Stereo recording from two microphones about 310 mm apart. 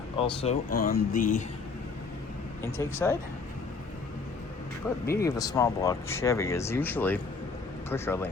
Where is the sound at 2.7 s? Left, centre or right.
Centre.